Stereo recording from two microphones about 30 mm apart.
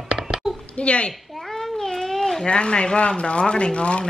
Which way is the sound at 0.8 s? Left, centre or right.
Left.